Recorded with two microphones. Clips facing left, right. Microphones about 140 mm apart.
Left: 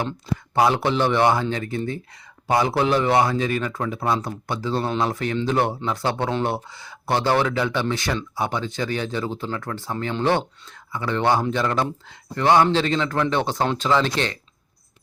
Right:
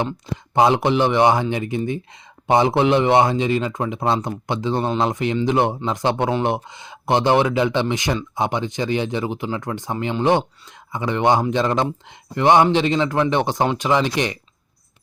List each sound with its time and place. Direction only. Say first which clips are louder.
0.5 s a man's voice: right 3 dB; 20° right (ahead or behind)